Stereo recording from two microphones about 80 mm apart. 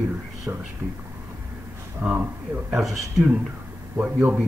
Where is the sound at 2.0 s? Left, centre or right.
Right.